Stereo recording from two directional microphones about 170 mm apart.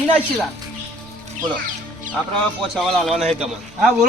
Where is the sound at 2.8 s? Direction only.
Centre (ahead or behind).